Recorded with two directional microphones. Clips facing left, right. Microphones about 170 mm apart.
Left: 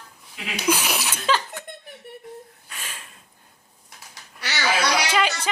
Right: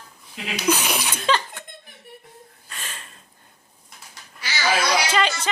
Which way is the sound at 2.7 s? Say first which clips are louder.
Right 1 dB; 10° left (ahead or behind).